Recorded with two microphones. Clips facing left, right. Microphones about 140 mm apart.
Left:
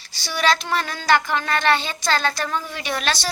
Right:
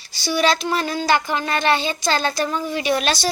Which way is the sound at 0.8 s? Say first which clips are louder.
Right 9 dB; 30° right (ahead or behind).